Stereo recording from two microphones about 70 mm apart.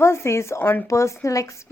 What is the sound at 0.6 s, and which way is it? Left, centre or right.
Speech, left.